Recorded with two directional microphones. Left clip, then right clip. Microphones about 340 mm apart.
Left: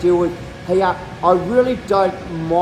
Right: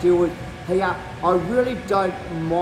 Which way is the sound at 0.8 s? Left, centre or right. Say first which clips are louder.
Left 6 dB; centre.